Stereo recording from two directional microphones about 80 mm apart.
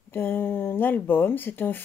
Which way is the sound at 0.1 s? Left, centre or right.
Left.